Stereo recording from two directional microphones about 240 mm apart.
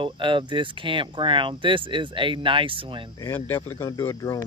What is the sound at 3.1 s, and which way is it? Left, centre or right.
Speech, centre.